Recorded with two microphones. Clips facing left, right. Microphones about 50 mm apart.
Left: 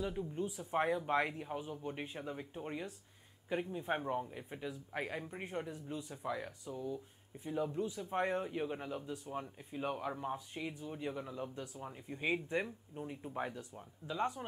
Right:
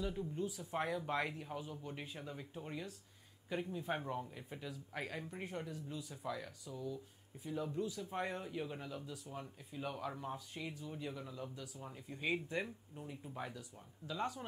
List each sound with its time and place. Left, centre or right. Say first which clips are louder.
0.0 s speech: left 2 dB; centre
0.4 s a man's voice: left 6 dB; left
11.8 s a man's voice: left 2 dB; centre